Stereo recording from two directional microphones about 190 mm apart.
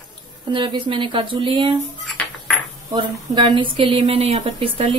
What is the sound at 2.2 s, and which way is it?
Ping, 5° left (ahead or behind).